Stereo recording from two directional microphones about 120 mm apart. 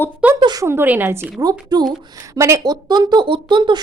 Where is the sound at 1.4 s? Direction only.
35° right (ahead or behind).